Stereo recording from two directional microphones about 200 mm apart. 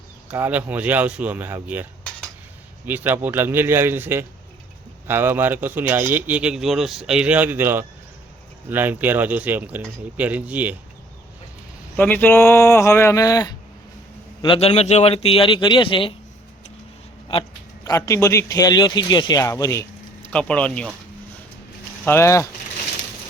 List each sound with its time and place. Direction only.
0.3 s speech: 5° right (ahead or behind)
11.9 s a man's voice: 10° left (ahead or behind); by 16.1 s 25° left (ahead or behind)
17.8 s a man's voice: 15° left (ahead or behind)
22.0 s a man's voice: 10° left (ahead or behind)